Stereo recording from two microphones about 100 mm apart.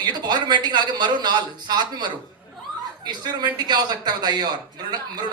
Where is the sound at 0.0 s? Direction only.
45° right (ahead or behind).